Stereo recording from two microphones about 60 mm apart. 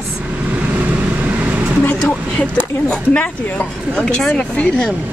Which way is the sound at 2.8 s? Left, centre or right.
Left.